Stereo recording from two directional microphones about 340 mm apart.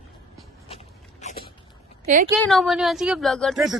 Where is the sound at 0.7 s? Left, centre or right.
Centre.